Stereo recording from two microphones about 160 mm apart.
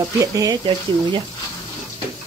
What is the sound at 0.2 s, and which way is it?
Speech, 20° right (ahead or behind).